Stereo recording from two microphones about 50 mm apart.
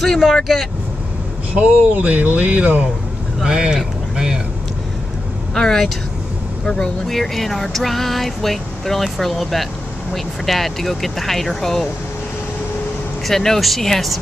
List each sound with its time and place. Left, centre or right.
0.2 s speech: centre
1.5 s speech: right
3.4 s speech: centre
5.5 s speech: centre
7.1 s speech: centre
13.3 s speech: centre